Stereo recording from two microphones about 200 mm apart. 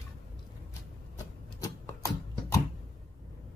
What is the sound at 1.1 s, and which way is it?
Tick-tock, 15° left (ahead or behind).